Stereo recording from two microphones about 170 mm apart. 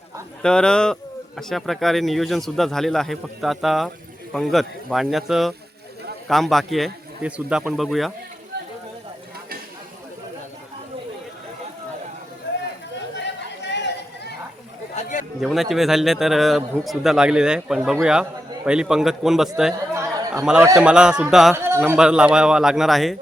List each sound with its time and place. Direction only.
0.4 s speech: 5° left (ahead or behind)
13.2 s chatter: 90° left
14.9 s a sound: 50° left (ahead or behind)
15.4 s speech: centre (ahead or behind)
19.9 s chatter: 15° right (ahead or behind)
20.4 s speech: 5° right (ahead or behind)
21.5 s speech: 15° right (ahead or behind)